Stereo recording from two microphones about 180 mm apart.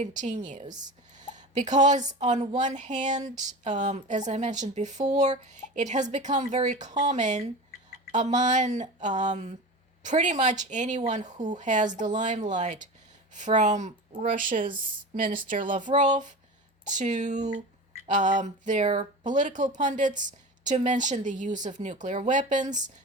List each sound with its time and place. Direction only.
0.0 s speech: 40° right (ahead or behind)